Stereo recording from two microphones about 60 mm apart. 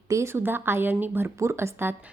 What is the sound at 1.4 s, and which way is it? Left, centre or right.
Speech, right.